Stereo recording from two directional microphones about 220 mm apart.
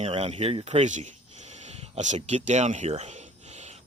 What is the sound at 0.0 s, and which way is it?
Speech, 30° right (ahead or behind).